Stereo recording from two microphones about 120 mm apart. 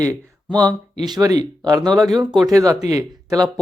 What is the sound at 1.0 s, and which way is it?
Speech, 35° right (ahead or behind).